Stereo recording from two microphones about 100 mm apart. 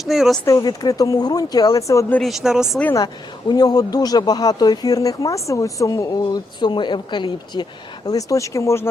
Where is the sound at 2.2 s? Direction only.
Centre (ahead or behind).